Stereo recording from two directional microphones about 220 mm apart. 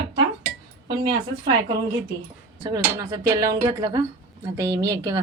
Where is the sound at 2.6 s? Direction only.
15° right (ahead or behind).